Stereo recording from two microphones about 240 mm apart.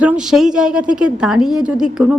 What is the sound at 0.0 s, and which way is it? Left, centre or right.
A woman's voice, centre.